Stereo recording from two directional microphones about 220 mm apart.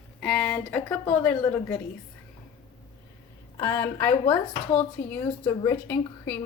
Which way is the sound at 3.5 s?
10° left (ahead or behind).